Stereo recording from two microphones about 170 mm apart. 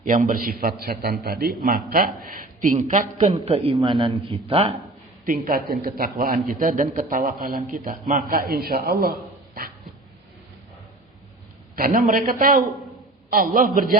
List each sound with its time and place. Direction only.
0.0 s a man's voice: 50° right (ahead or behind)
3.5 s speech: 30° right (ahead or behind)
5.2 s a man's voice: 55° right (ahead or behind)
11.8 s a man's voice: 55° right (ahead or behind)